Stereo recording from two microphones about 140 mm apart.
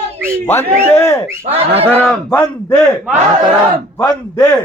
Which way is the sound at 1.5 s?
45° right (ahead or behind).